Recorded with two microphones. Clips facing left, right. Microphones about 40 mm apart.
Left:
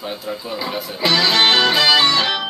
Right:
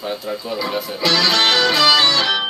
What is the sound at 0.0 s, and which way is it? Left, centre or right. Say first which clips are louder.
Speech: right 2 dB; centre.